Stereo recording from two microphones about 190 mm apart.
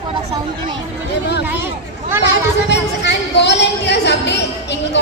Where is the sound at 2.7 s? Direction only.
65° left (ahead or behind).